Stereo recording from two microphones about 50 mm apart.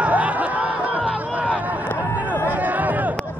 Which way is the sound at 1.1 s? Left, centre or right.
Right.